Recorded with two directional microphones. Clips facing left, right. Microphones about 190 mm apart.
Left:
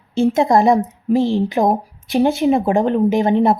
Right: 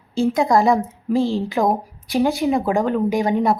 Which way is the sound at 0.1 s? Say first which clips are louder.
Left 3 dB; 25° left (ahead or behind).